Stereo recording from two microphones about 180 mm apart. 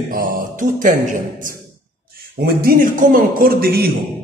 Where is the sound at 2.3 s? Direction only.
60° right (ahead or behind).